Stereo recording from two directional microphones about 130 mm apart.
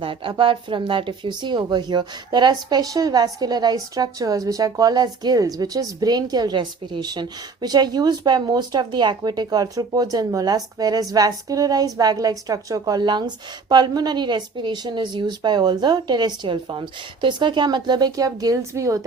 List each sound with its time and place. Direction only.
0.0 s speech: 40° right (ahead or behind); by 19.0 s 25° right (ahead or behind)